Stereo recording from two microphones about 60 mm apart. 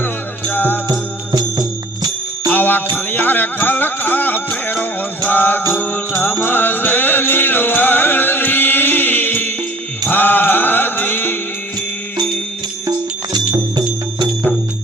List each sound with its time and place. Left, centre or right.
0.0 s music: left
0.9 s music: right
2.5 s music: left